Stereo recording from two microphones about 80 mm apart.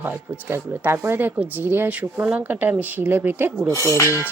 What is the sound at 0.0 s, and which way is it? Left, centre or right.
Speech, right.